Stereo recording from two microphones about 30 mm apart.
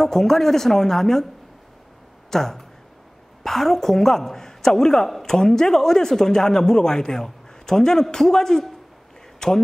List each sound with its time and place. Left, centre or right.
0.0 s speech: centre
2.3 s a man's voice: centre